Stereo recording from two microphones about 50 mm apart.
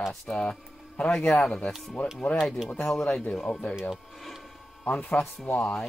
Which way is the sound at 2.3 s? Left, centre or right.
Centre.